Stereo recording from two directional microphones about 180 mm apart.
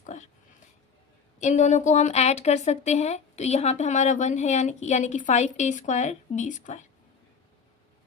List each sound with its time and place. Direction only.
0.0 s dog: 40° left (ahead or behind)
1.4 s a woman's voice: 40° left (ahead or behind)